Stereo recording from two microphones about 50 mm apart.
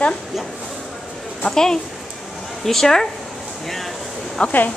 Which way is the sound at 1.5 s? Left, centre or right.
Centre.